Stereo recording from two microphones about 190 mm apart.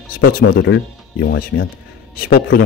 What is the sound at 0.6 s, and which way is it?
Speech, 70° left (ahead or behind).